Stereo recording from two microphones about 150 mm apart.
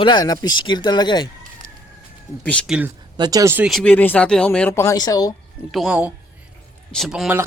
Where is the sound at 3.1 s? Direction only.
25° right (ahead or behind).